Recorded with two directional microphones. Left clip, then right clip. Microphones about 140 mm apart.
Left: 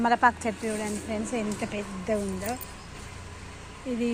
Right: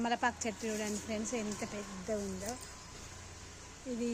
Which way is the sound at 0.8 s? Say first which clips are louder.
Left 6 dB; 90° right.